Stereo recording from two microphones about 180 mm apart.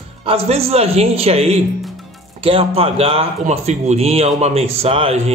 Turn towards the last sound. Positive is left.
turn(degrees=-35)  # may be behind; listen again after turning